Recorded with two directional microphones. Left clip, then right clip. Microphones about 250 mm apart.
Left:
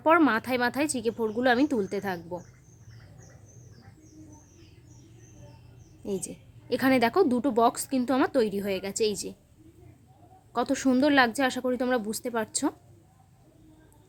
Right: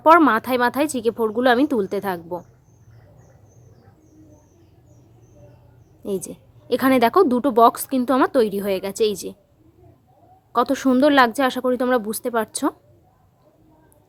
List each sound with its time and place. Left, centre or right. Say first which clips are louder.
0.0 s a woman's voice: right 9 dB; centre
6.1 s a woman's voice: right 7 dB; centre
10.5 s a woman's voice: right 7 dB; centre